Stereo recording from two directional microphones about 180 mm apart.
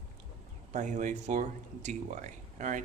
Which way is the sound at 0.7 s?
40° right (ahead or behind).